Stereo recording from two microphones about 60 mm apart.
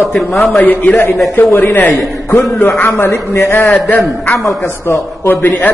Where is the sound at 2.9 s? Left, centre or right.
Left.